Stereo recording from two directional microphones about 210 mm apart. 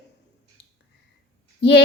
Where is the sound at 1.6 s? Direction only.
55° left (ahead or behind).